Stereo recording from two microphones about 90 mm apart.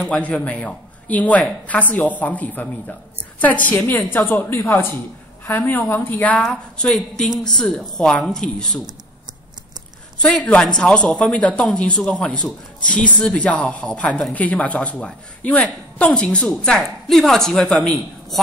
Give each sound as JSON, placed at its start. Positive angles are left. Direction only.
{"t": 0.1, "sound": "a woman's voice", "side_deg": 15}
{"t": 6.4, "sound": "speech", "side_deg": 5}
{"t": 10.1, "sound": "a woman's voice", "side_deg": 10}